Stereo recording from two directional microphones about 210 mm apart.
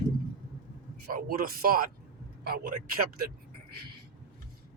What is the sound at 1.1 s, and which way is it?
Speech, 45° right (ahead or behind).